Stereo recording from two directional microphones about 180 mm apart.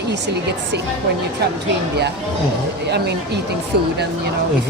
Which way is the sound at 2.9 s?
70° right (ahead or behind).